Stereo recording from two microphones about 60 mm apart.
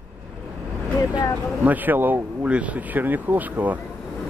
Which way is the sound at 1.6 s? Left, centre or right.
Right.